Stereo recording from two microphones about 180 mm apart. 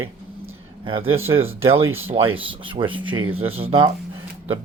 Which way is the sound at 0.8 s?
30° right (ahead or behind).